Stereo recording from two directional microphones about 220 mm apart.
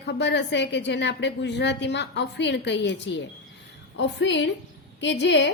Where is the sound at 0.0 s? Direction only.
50° left (ahead or behind).